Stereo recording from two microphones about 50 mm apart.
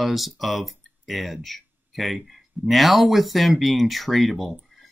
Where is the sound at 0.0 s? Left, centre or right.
Centre.